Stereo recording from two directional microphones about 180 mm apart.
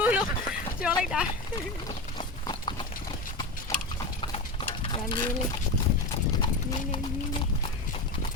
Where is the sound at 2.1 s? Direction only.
25° left (ahead or behind).